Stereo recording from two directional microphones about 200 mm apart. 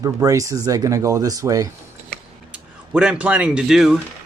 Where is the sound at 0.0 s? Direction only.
15° right (ahead or behind).